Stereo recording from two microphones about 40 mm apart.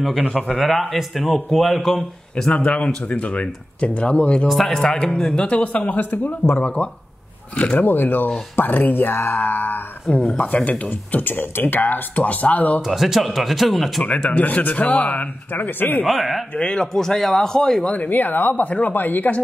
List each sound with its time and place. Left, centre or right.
0.3 s speech: centre
2.5 s speech: left
4.6 s a man's voice: centre
5.6 s speech: left
6.8 s speech: left
7.7 s speech: left
10.1 s speech: left
10.9 s speech: left
12.8 s speech: centre
14.3 s speech: left
15.5 s speech: left
16.1 s speech: centre
16.5 s a man's voice: left
17.9 s speech: left